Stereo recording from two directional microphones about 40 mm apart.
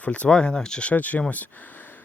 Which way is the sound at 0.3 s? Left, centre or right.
Centre.